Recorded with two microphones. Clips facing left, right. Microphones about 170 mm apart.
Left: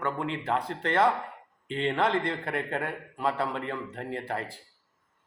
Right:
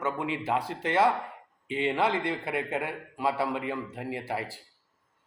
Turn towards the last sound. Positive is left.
turn(degrees=-10)  # may be behind; listen again after turning